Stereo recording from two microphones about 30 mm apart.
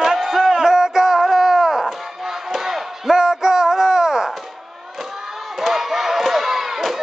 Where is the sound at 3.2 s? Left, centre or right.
Centre.